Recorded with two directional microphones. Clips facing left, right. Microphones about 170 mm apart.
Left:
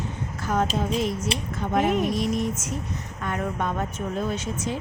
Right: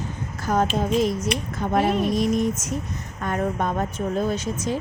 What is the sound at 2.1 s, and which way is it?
A woman's voice, 45° right (ahead or behind).